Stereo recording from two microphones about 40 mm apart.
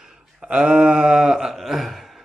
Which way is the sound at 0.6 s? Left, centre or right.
Right.